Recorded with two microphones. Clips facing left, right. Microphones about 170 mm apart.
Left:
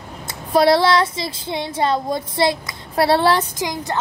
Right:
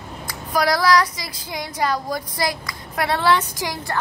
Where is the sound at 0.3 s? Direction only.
30° left (ahead or behind).